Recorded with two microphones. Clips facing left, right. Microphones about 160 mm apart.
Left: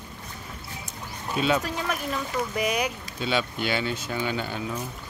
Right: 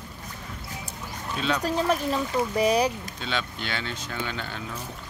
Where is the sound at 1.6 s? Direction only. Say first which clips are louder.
Right 5 dB; 30° right (ahead or behind).